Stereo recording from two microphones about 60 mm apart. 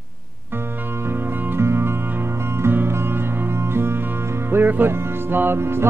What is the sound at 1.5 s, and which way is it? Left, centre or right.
Music, right.